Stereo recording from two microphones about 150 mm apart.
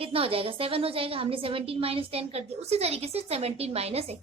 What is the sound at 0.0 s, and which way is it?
A woman's voice, 40° right (ahead or behind).